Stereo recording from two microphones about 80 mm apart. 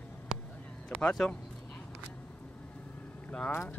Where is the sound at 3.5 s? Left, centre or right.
Left.